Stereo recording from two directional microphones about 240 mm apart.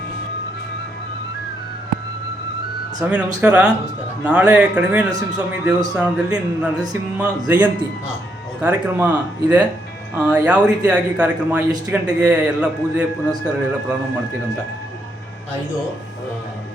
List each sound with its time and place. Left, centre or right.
3.0 s a man's voice: centre